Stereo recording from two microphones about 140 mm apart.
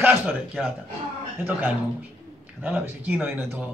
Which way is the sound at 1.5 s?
15° right (ahead or behind).